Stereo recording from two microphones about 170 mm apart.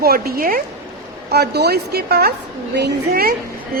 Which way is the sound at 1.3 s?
70° right (ahead or behind).